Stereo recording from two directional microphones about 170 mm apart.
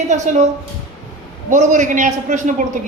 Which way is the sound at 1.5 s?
50° right (ahead or behind).